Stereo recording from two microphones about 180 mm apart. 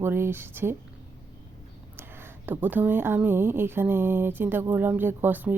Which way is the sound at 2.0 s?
10° right (ahead or behind).